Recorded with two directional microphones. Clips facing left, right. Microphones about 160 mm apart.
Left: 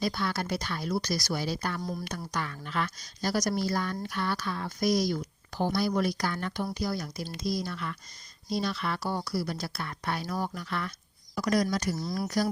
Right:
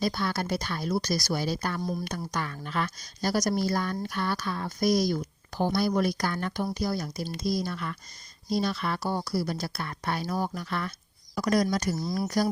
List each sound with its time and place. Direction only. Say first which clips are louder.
0.0 s speech: right 2 dB; 40° right (ahead or behind)
9.0 s speech: right 3 dB; 30° right (ahead or behind)
9.4 s speech: right 2 dB; 45° right (ahead or behind)